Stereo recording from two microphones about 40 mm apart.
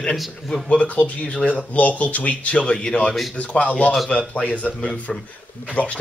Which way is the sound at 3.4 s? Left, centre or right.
Left.